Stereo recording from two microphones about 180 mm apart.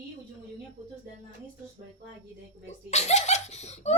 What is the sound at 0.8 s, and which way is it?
Speech, 30° right (ahead or behind).